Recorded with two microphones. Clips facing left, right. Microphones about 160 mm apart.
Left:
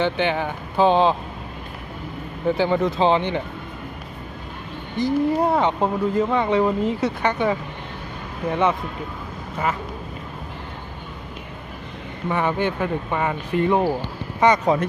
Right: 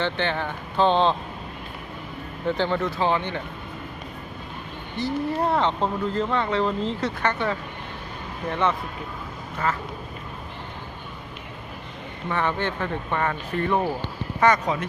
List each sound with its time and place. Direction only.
0.0 s speech: 10° left (ahead or behind)
2.6 s speech: 15° left (ahead or behind)
4.9 s speech: 15° left (ahead or behind)
12.3 s speech: 10° left (ahead or behind)